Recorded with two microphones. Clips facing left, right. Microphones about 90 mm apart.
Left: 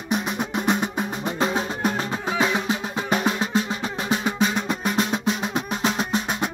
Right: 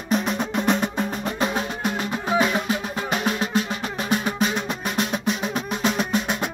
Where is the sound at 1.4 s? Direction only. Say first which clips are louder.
Left 3 dB; 30° left (ahead or behind).